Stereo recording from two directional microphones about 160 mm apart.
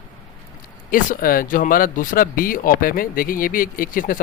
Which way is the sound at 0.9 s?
60° left (ahead or behind).